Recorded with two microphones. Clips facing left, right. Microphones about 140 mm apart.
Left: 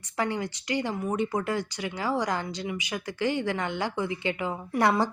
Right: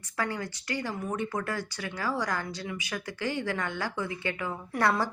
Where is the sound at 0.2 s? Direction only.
20° left (ahead or behind).